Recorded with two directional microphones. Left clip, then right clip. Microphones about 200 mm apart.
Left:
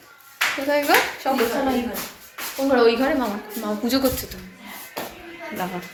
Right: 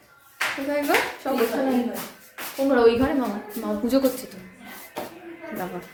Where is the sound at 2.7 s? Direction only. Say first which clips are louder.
Left 1 dB; 20° right (ahead or behind).